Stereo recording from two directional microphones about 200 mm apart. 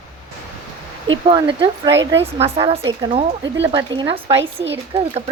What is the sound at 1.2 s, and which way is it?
Speech, 25° right (ahead or behind).